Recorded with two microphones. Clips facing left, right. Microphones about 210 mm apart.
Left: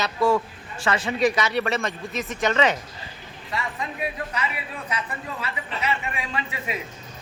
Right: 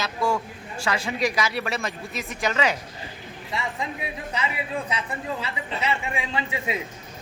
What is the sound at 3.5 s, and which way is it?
Speech, 25° right (ahead or behind).